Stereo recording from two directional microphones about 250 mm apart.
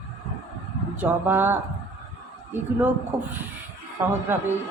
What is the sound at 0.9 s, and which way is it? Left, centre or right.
Speech, centre.